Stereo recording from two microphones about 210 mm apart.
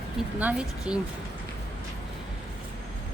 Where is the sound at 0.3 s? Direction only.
5° right (ahead or behind).